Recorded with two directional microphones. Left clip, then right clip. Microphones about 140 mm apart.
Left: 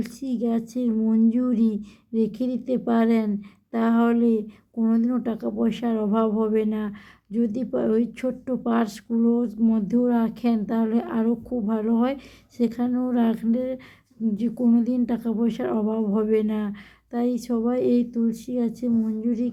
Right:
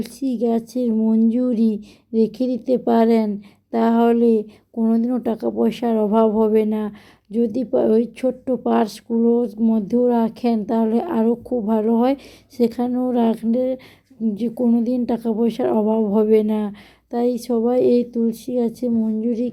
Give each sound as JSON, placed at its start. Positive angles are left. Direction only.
{"t": 0.0, "sound": "speech", "side_deg": -25}
{"t": 12.9, "sound": "speech", "side_deg": -20}